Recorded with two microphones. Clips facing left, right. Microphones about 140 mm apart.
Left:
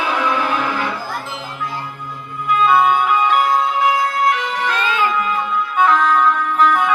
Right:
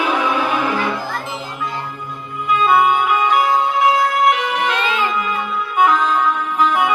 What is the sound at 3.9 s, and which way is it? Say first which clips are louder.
Organ: right 2 dB; 20° right (ahead or behind).